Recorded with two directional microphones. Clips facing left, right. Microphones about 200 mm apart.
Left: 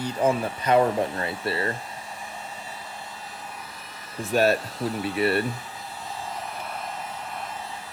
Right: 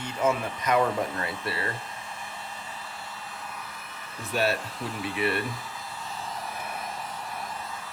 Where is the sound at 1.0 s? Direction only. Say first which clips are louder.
Left 4 dB; 25° left (ahead or behind).